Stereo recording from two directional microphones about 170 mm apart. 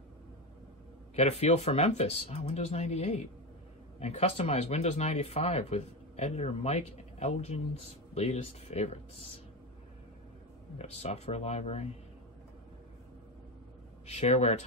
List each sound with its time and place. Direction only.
1.1 s speech: 40° left (ahead or behind)
10.8 s speech: 40° left (ahead or behind)
14.0 s speech: 40° left (ahead or behind)